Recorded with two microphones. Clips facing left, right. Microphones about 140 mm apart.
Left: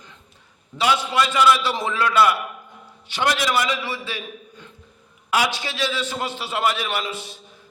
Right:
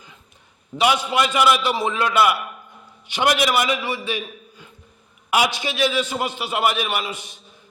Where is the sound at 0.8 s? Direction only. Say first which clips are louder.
Right 1 dB; 15° right (ahead or behind).